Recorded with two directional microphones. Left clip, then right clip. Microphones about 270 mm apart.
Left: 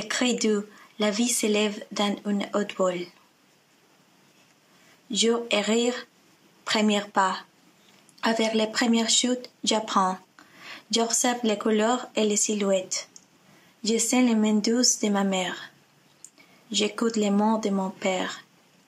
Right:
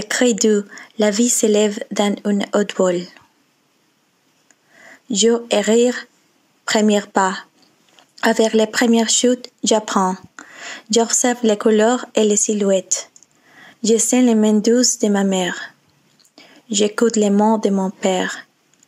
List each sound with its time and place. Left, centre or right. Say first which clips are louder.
0.0 s speech: right 9 dB; right
5.1 s speech: right 8 dB; right